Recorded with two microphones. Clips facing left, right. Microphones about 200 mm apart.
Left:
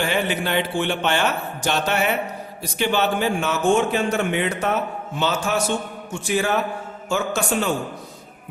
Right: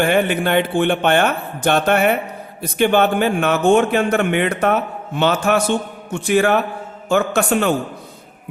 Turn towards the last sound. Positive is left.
turn(degrees=-60)  # may be behind; listen again after turning